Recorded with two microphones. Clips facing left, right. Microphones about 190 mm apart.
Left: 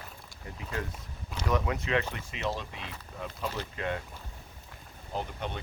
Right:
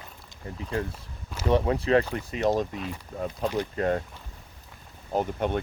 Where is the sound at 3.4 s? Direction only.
15° right (ahead or behind).